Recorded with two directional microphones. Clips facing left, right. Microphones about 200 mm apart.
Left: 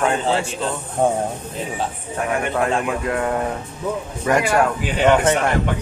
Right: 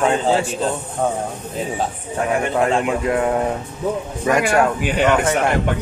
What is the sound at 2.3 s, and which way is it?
Speech, 20° right (ahead or behind).